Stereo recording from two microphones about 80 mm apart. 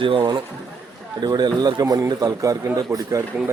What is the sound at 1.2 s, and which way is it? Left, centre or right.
A man's voice, right.